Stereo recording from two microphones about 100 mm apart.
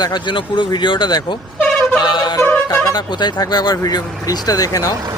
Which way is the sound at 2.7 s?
40° left (ahead or behind).